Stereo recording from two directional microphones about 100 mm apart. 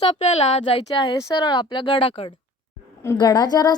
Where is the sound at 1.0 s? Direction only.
45° left (ahead or behind); by 2.3 s 65° left (ahead or behind).